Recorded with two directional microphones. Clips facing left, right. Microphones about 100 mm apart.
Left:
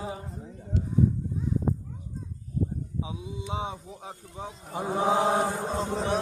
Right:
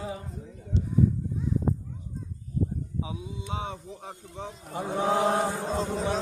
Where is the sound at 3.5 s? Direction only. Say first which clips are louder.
Left 1 dB; 10° left (ahead or behind).